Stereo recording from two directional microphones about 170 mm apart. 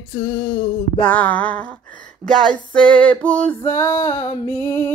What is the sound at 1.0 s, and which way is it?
Music, 10° left (ahead or behind).